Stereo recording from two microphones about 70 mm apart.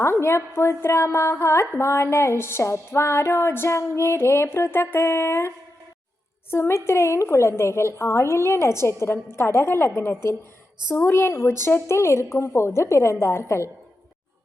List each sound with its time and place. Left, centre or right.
0.0 s a woman's voice: left